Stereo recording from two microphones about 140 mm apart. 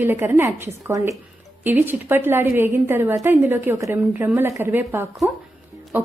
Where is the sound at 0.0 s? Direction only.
15° right (ahead or behind).